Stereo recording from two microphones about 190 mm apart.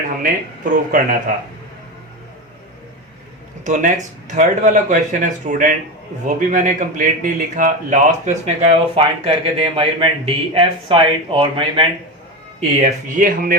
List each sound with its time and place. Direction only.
0.2 s speech: 45° right (ahead or behind)
3.6 s a man's voice: 40° right (ahead or behind)
12.5 s speech: 40° right (ahead or behind)